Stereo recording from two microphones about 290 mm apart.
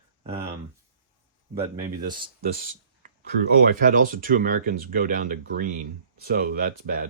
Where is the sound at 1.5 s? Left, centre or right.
Right.